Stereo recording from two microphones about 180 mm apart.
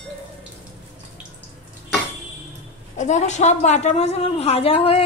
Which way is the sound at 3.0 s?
40° left (ahead or behind).